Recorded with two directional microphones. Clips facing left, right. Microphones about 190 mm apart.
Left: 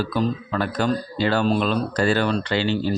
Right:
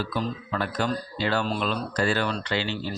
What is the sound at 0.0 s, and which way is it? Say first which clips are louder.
Speech: left 6 dB; 35° left (ahead or behind).